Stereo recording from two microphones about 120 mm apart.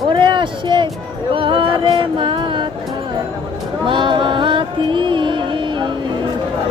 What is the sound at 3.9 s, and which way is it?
Music, 40° right (ahead or behind).